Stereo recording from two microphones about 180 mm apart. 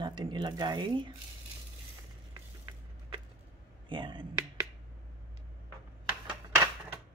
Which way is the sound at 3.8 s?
25° right (ahead or behind).